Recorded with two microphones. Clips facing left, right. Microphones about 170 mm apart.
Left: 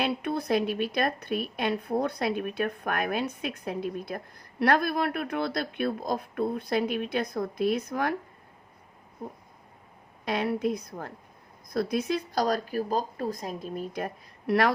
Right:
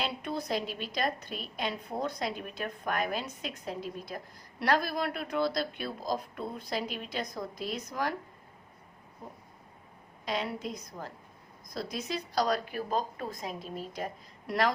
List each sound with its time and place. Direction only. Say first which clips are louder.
0.0 s a woman's voice: left 6 dB; 60° left (ahead or behind)
10.2 s a woman's voice: left 7 dB; 60° left (ahead or behind)